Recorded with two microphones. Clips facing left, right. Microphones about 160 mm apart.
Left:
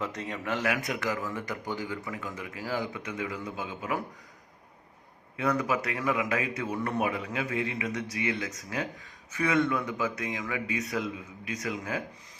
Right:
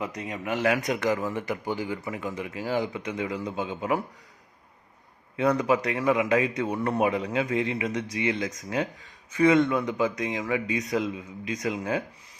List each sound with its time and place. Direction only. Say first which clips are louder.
0.0 s a man's voice: right 2 dB; 10° right (ahead or behind)
1.0 s a man's voice: right 6 dB; 25° right (ahead or behind)
5.4 s a man's voice: right 5 dB; 30° right (ahead or behind)